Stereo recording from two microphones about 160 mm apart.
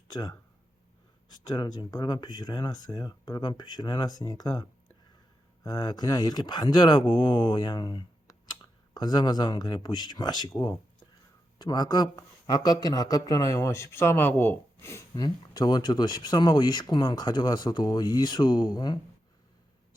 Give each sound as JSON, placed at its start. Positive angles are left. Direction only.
{"t": 0.1, "sound": "speech", "side_deg": 25}
{"t": 11.6, "sound": "speech", "side_deg": 25}